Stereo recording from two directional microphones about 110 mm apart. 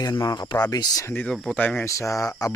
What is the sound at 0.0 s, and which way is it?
Speech, 35° left (ahead or behind).